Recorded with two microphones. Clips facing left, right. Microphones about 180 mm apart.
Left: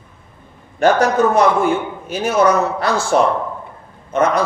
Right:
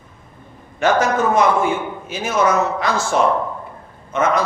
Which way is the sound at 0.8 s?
35° left (ahead or behind).